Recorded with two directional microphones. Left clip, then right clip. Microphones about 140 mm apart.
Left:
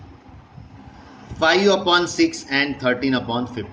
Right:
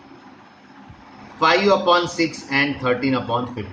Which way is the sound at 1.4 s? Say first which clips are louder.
Even; 90° left.